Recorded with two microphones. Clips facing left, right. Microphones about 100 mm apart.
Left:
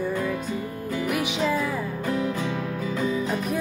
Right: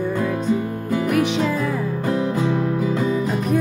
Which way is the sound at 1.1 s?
5° left (ahead or behind).